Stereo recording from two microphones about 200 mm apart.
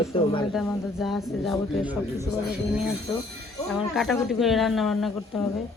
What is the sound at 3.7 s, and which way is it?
Speech, centre (ahead or behind).